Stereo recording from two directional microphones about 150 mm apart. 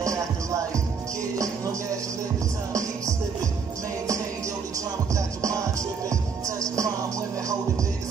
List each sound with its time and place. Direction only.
0.0 s music: 20° right (ahead or behind)
5.1 s music: 20° right (ahead or behind)
6.6 s music: 20° right (ahead or behind)